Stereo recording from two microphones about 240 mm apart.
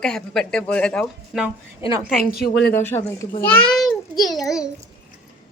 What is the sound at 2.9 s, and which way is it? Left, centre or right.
A child's voice, centre.